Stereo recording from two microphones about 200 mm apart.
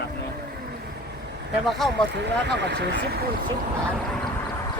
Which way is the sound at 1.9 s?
60° right (ahead or behind).